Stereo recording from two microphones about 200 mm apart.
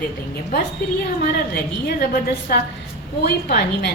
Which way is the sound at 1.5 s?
50° left (ahead or behind).